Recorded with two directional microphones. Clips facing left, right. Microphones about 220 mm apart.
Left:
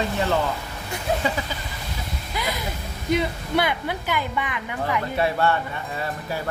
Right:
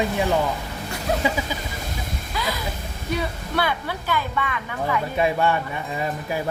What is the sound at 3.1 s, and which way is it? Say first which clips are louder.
Speech: left 4 dB; 20° left (ahead or behind).